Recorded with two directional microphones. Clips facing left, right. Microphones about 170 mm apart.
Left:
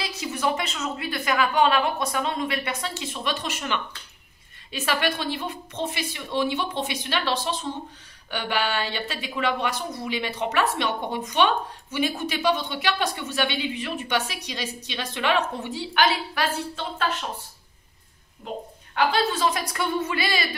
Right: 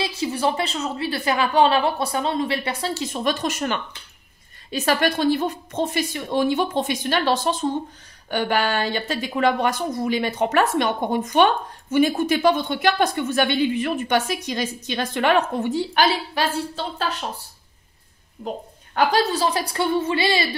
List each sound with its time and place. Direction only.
0.0 s a woman's voice: 30° right (ahead or behind)
18.9 s speech: 40° right (ahead or behind)